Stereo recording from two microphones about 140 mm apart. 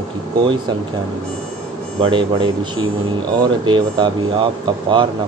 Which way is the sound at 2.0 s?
35° right (ahead or behind).